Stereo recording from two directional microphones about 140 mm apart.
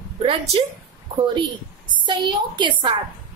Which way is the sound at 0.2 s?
40° right (ahead or behind).